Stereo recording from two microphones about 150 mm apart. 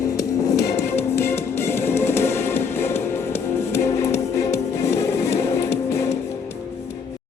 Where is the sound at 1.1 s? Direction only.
15° left (ahead or behind).